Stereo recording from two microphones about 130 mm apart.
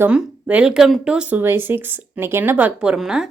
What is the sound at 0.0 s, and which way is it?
Speech, 10° right (ahead or behind).